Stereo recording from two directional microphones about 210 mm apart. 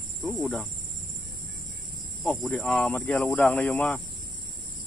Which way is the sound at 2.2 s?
5° left (ahead or behind).